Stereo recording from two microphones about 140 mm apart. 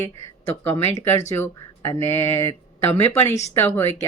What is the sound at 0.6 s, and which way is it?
Speech, 15° left (ahead or behind).